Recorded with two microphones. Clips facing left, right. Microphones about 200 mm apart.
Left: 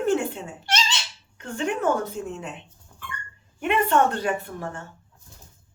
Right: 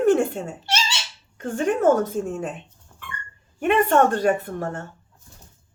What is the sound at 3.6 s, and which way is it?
A woman's voice, 45° right (ahead or behind).